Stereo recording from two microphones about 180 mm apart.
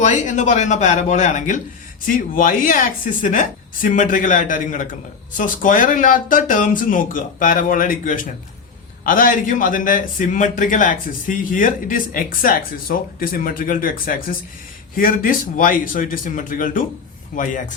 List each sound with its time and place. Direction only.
0.0 s a man's voice: 45° left (ahead or behind)